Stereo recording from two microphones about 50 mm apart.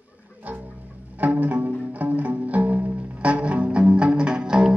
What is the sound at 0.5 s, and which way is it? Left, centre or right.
Music, right.